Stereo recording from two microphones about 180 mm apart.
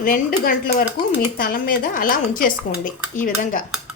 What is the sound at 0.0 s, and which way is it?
Speech, 50° left (ahead or behind).